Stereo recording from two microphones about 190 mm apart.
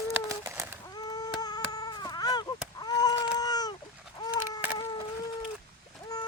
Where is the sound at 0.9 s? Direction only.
20° left (ahead or behind).